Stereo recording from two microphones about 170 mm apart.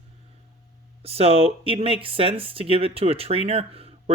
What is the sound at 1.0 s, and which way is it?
Speech, 35° right (ahead or behind).